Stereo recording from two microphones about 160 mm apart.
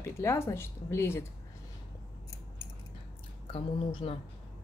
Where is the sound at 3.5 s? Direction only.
35° left (ahead or behind).